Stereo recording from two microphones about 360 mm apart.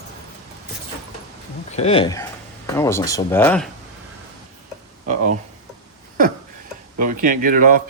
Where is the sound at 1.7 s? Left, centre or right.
Centre.